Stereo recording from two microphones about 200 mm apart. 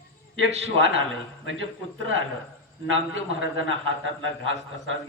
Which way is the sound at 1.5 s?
75° right (ahead or behind).